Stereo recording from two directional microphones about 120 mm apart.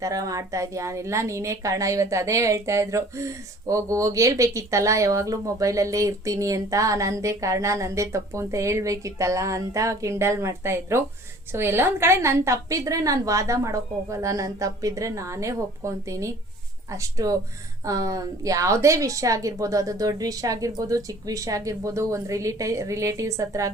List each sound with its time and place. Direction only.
0.0 s a woman's voice: 30° right (ahead or behind)